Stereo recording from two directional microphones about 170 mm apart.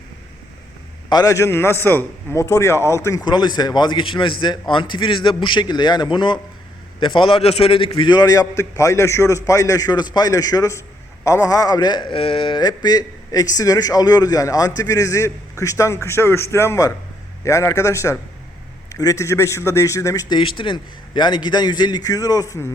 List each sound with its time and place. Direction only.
1.1 s a man's voice: 20° left (ahead or behind)